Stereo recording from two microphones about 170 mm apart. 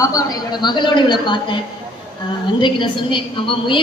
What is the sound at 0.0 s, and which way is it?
A man's voice, 20° left (ahead or behind).